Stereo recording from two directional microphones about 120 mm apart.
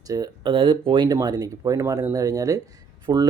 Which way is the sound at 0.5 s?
45° right (ahead or behind).